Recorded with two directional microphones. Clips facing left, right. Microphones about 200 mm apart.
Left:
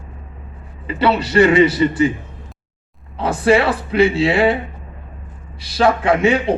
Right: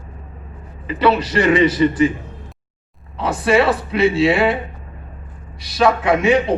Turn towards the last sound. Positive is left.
turn(degrees=30)  # may be behind; listen again after turning